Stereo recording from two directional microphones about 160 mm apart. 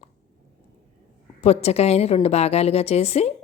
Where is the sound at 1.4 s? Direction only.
40° left (ahead or behind).